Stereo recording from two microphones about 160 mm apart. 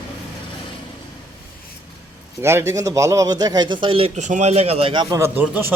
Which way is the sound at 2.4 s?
15° right (ahead or behind).